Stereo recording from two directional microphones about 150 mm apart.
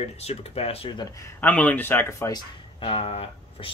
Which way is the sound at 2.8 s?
40° left (ahead or behind).